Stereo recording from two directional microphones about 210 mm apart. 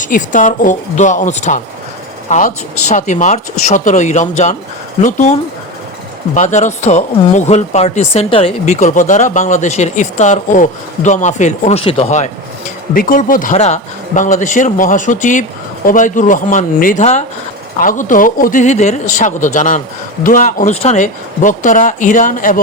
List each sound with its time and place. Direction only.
0.0 s speech: 40° left (ahead or behind)
6.3 s speech: 35° left (ahead or behind)